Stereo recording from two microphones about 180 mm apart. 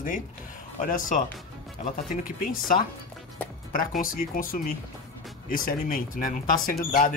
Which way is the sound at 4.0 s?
50° left (ahead or behind).